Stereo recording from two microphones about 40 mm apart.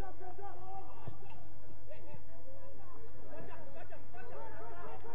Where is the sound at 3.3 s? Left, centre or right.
Centre.